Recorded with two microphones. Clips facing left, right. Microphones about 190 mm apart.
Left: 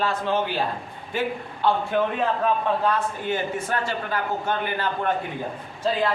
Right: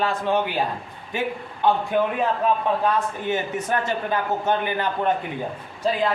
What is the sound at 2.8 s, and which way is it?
A man's voice, 20° right (ahead or behind).